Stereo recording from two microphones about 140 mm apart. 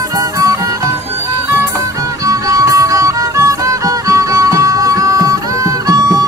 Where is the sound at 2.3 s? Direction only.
25° right (ahead or behind).